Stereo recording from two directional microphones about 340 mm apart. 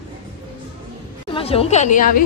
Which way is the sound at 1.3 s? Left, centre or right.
Centre.